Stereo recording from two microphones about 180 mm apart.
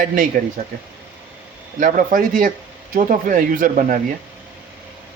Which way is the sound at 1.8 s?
50° right (ahead or behind).